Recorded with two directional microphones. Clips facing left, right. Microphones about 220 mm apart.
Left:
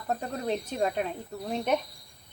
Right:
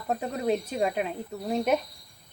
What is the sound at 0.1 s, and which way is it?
Speech, 5° right (ahead or behind).